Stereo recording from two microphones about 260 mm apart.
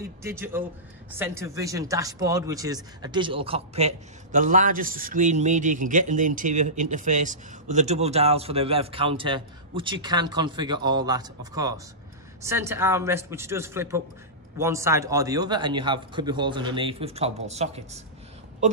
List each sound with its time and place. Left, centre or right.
0.2 s a man's voice: centre